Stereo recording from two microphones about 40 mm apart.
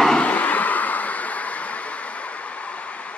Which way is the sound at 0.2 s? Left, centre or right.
Left.